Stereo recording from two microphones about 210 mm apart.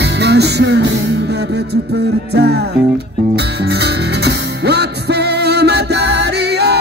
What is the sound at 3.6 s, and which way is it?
Music, 50° right (ahead or behind).